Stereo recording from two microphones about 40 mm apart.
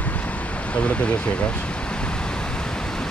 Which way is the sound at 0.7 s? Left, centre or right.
Left.